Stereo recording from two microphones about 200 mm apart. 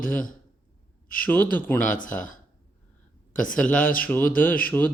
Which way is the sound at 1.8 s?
40° left (ahead or behind).